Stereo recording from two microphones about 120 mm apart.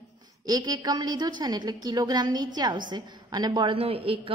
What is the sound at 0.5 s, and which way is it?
A woman's voice, 35° right (ahead or behind).